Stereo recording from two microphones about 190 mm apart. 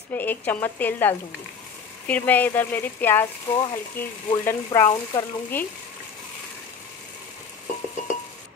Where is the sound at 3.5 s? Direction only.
20° left (ahead or behind).